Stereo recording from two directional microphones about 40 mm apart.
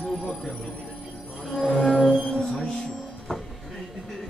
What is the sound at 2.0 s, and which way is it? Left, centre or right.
Music, centre.